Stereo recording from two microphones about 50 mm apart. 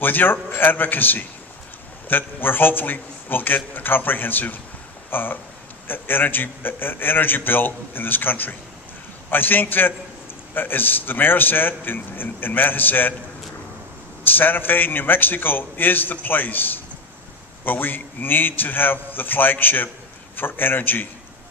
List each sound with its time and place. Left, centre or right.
0.0 s a man's voice: left
14.2 s a man's voice: left